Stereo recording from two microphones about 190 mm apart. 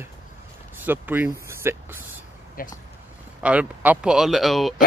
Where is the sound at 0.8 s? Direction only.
10° right (ahead or behind).